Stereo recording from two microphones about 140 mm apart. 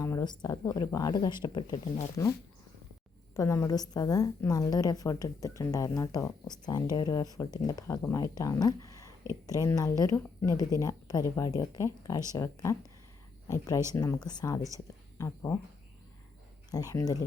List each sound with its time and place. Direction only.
0.0 s a woman's voice: 25° left (ahead or behind)
3.3 s a woman's voice: 20° left (ahead or behind)
16.7 s a woman's voice: 25° left (ahead or behind)